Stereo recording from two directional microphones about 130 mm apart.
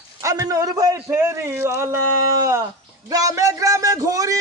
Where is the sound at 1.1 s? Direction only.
20° right (ahead or behind).